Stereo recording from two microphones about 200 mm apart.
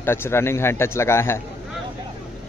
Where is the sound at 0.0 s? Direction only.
10° left (ahead or behind).